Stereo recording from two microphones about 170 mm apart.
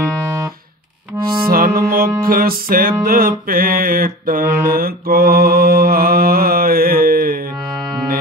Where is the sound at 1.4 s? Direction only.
60° right (ahead or behind).